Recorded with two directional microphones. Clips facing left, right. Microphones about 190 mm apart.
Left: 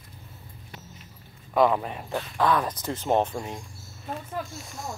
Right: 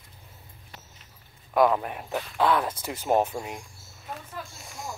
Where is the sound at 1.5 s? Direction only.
Centre (ahead or behind).